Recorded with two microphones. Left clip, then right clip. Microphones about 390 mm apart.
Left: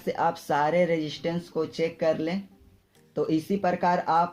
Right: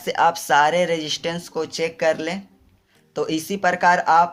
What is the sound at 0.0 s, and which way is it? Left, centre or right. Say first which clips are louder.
Speech: right 8 dB; right.